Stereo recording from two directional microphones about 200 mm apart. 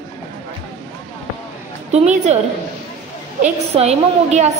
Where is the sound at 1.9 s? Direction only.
35° right (ahead or behind).